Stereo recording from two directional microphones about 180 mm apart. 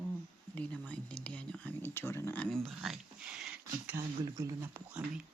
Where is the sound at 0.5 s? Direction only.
5° left (ahead or behind).